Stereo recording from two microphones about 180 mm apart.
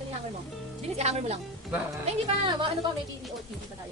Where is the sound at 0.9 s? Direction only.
35° right (ahead or behind).